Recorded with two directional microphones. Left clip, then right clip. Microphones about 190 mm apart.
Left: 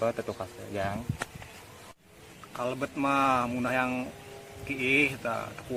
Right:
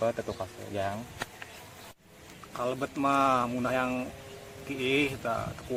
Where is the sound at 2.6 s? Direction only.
20° left (ahead or behind).